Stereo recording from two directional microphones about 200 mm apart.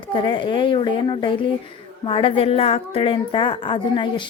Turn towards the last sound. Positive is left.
turn(degrees=25)  # may be behind; listen again after turning